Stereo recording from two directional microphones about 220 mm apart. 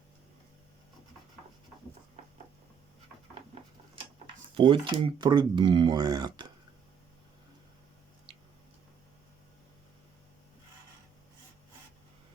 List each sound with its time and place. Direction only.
4.5 s speech: 25° right (ahead or behind)